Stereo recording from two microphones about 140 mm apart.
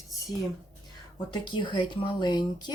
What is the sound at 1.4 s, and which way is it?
Speech, 35° left (ahead or behind).